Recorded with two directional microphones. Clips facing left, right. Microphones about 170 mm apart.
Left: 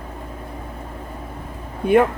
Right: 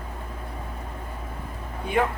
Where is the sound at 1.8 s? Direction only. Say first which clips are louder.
Left 11 dB; 60° left (ahead or behind).